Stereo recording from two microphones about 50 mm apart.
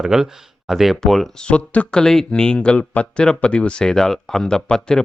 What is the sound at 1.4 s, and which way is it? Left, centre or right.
Speech, left.